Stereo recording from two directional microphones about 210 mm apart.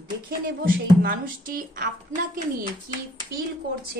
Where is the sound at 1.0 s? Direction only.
40° right (ahead or behind).